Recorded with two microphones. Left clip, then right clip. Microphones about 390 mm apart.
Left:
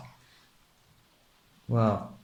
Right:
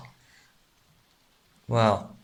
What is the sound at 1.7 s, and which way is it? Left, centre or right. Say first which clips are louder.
Speech: right 5 dB; right.